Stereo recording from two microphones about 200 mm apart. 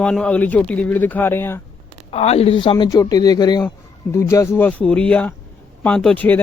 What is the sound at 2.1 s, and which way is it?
Speech, 30° left (ahead or behind).